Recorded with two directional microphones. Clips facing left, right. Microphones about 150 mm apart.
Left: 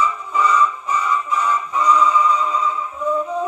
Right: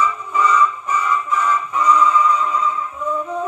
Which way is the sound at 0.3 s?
10° left (ahead or behind).